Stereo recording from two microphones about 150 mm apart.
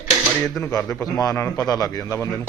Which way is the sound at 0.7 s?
20° left (ahead or behind).